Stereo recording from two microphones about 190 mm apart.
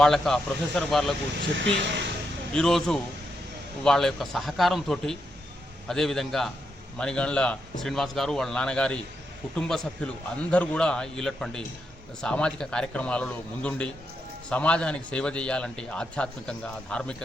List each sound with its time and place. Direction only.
0.0 s a man's voice: centre (ahead or behind)
1.5 s speech: 70° right (ahead or behind)
2.6 s a man's voice: centre (ahead or behind)